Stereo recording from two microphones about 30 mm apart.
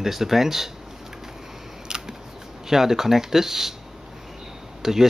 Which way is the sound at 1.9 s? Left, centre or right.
Right.